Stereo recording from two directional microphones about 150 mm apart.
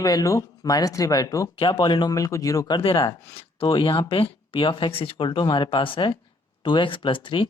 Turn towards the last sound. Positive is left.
turn(degrees=35)  # may be behind; listen again after turning